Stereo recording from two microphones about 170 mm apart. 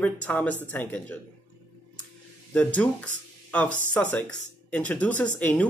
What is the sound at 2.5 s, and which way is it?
Speech, 10° left (ahead or behind).